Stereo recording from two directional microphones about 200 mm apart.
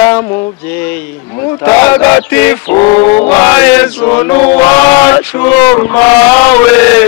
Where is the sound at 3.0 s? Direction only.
35° left (ahead or behind).